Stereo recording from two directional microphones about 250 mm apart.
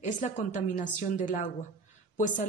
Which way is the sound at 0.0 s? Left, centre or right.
Left.